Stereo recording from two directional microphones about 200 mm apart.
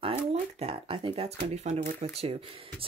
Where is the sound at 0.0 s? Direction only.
30° right (ahead or behind).